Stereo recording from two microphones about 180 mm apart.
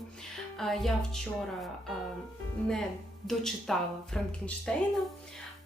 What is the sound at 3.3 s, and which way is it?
Speech, centre (ahead or behind).